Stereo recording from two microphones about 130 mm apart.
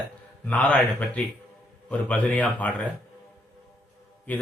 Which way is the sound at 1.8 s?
10° left (ahead or behind).